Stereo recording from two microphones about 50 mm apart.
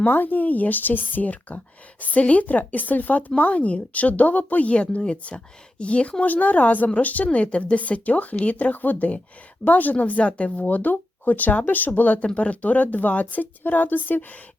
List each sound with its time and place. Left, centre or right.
0.0 s speech: left